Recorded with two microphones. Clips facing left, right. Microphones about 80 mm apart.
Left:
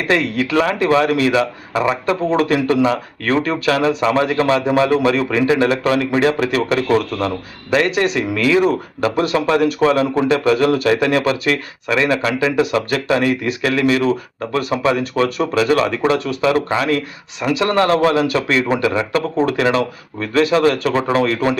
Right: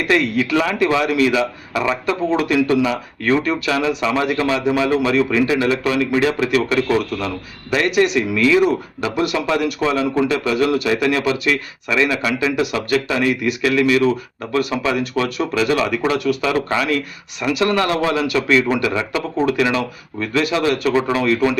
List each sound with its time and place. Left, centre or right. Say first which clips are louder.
0.1 s speech: even; left